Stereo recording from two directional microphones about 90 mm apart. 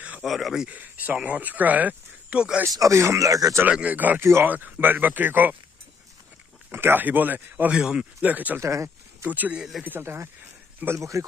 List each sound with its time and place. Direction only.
0.2 s speech: centre (ahead or behind)
0.7 s speech: 20° right (ahead or behind)
2.7 s speech: 35° right (ahead or behind)
3.6 s speech: 15° right (ahead or behind)
6.7 s speech: 25° right (ahead or behind)
7.7 s speech: 10° right (ahead or behind)
8.5 s speech: 30° right (ahead or behind)
9.3 s speech: 20° right (ahead or behind)
9.6 s speech: centre (ahead or behind)
9.8 s speech: 25° right (ahead or behind)